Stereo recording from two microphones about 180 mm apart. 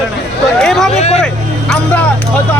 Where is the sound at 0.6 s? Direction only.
5° left (ahead or behind).